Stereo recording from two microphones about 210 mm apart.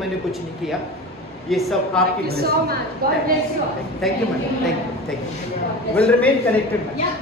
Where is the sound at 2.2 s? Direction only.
50° right (ahead or behind).